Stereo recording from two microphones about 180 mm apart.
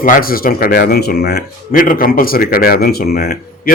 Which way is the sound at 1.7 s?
50° left (ahead or behind).